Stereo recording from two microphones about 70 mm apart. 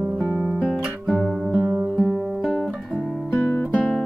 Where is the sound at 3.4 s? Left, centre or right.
Left.